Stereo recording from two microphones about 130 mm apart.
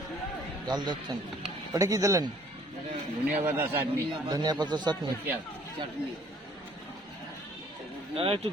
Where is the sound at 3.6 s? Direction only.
15° right (ahead or behind).